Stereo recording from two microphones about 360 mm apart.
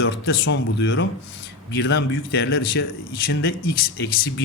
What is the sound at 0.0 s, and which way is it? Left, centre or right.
A man's voice, left.